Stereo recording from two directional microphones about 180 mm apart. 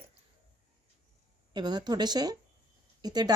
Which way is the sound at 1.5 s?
25° right (ahead or behind).